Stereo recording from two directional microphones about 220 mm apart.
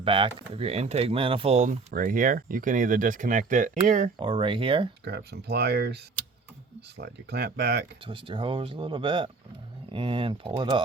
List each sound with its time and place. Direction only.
0.0 s speech: 25° right (ahead or behind)
4.2 s speech: 25° right (ahead or behind)
5.0 s speech: 50° right (ahead or behind)
8.0 s speech: 25° right (ahead or behind)